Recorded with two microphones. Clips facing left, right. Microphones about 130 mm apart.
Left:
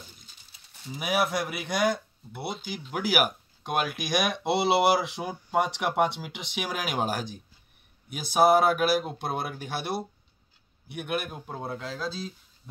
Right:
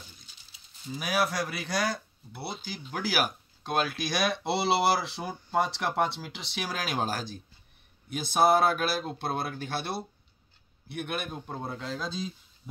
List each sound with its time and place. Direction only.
0.9 s speech: 20° left (ahead or behind); by 12.3 s 5° left (ahead or behind)